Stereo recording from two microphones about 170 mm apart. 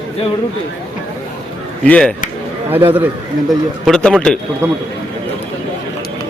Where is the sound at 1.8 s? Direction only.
10° left (ahead or behind).